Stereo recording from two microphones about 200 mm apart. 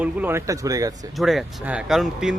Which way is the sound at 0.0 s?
10° right (ahead or behind).